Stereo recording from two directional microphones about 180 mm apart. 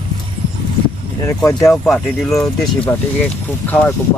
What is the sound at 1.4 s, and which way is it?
Speech, 15° left (ahead or behind).